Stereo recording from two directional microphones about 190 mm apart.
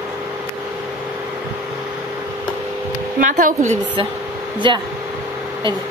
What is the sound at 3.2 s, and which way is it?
Speech, 45° right (ahead or behind).